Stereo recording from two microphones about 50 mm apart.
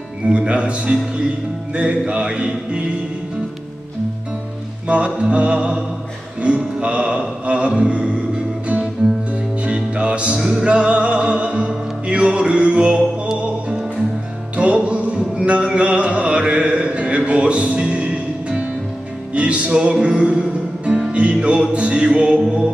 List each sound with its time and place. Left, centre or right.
0.3 s mantra: right
4.8 s mantra: right
9.6 s music: centre
10.4 s music: centre
10.7 s music: right
19.3 s mantra: right
21.1 s music: right